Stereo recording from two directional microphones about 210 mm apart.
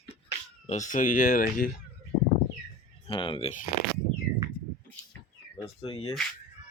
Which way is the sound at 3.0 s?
25° left (ahead or behind).